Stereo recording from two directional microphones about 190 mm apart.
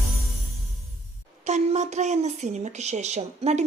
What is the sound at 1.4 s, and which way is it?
A woman's voice, 35° right (ahead or behind).